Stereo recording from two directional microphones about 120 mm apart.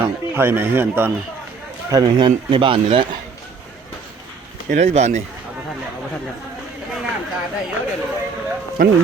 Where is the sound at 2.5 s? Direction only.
45° right (ahead or behind).